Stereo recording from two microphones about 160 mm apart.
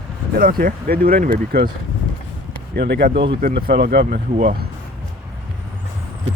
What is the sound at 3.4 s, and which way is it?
Speech, 70° right (ahead or behind).